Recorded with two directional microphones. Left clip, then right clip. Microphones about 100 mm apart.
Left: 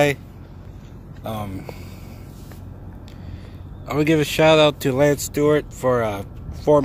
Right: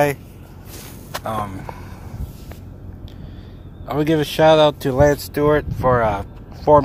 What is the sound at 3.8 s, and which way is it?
Speech, 10° left (ahead or behind).